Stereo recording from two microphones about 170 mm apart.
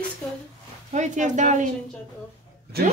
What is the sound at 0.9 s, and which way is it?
Speech, 45° right (ahead or behind).